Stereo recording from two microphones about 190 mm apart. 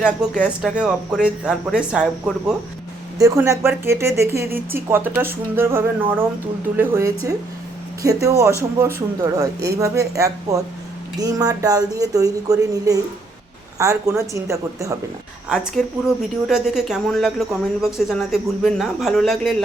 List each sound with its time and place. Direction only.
0.3 s speech: centre (ahead or behind)
3.2 s speech: 15° right (ahead or behind)
15.4 s speech: centre (ahead or behind)